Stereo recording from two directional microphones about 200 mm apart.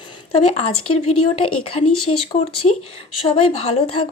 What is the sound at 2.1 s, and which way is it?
Speech, 30° left (ahead or behind).